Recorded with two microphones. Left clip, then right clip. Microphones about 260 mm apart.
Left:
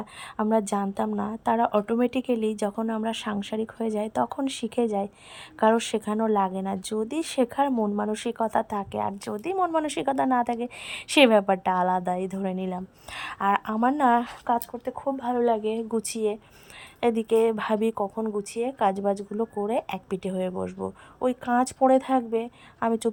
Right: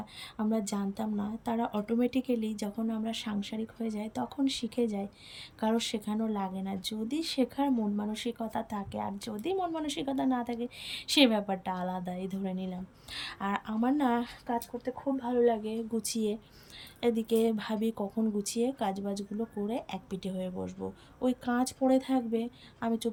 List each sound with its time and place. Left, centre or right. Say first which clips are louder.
0.0 s speech: left 7 dB; centre
20.7 s speech: left 7 dB; left
21.2 s speech: left 7 dB; centre